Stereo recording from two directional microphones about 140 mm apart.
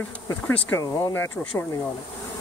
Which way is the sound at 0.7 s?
20° left (ahead or behind).